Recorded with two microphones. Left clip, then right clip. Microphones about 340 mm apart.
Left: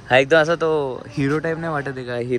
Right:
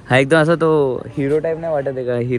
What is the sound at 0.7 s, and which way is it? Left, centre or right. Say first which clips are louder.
Speech: right 5 dB; right.